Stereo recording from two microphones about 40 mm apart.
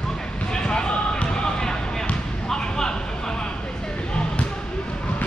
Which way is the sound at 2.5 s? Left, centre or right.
Centre.